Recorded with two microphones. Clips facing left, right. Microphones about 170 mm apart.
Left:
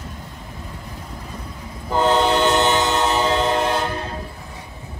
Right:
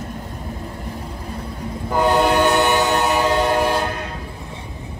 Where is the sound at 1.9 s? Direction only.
10° right (ahead or behind).